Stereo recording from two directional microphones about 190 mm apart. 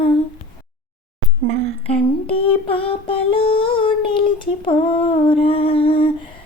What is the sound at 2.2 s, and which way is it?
Child singing, 30° left (ahead or behind).